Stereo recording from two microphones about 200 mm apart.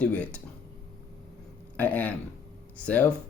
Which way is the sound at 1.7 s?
10° left (ahead or behind).